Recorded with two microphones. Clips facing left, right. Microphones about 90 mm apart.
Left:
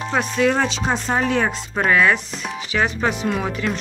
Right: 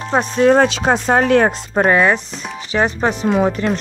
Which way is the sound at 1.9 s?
25° right (ahead or behind).